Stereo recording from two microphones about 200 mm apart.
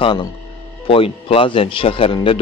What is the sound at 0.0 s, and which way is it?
Speech, 25° left (ahead or behind).